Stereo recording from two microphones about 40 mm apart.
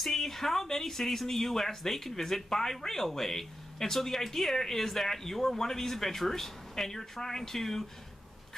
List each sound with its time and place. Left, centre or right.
0.0 s speech: centre